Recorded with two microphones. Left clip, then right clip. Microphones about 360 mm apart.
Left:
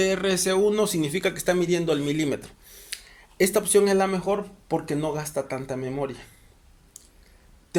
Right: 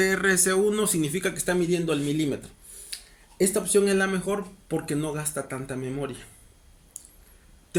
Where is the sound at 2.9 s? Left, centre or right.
Left.